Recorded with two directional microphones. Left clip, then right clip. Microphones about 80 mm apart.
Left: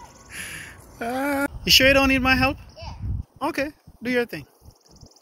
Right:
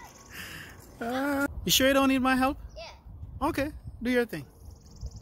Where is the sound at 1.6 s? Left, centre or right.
Right.